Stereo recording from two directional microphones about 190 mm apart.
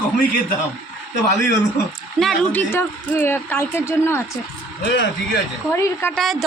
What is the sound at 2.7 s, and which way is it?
A woman's voice, 15° left (ahead or behind).